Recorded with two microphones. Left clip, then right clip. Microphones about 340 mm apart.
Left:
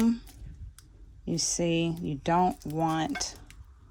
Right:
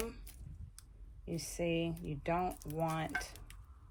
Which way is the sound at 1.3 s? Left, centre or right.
Left.